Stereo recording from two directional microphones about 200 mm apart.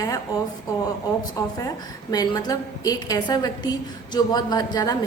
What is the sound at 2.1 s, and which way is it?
A woman's voice, 20° left (ahead or behind).